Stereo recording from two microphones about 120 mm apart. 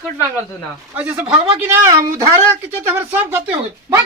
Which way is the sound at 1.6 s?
25° right (ahead or behind).